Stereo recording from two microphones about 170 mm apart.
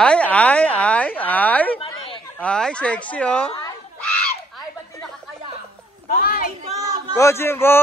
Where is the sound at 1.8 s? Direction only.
30° left (ahead or behind).